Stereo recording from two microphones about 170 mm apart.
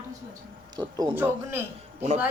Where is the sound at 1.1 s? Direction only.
10° right (ahead or behind).